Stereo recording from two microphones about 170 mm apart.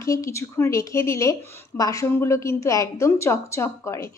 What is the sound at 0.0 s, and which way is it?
A woman's voice, 20° left (ahead or behind).